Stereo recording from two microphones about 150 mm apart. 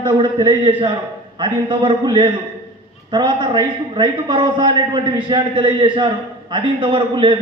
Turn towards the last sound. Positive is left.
turn(degrees=-35)  # may be behind; listen again after turning